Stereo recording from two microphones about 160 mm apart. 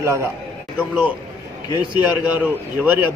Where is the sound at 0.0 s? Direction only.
15° right (ahead or behind).